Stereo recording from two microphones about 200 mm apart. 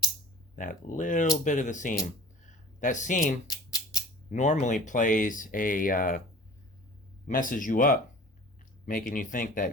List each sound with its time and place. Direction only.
0.5 s speech: 40° left (ahead or behind)
3.4 s a sound: 20° left (ahead or behind)
4.3 s speech: 35° left (ahead or behind)
7.3 s speech: 40° left (ahead or behind)